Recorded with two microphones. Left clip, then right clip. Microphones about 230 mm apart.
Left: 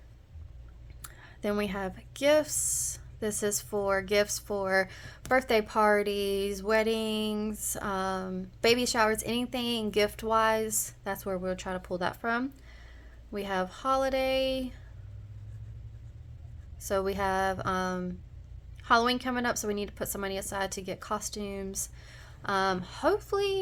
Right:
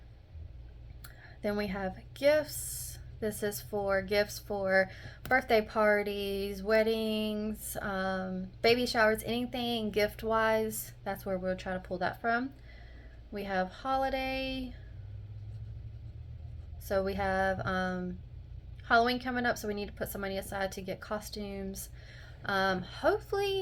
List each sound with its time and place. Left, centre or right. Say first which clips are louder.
1.0 s a woman's voice: left 2 dB; left
16.8 s speech: left 2 dB; left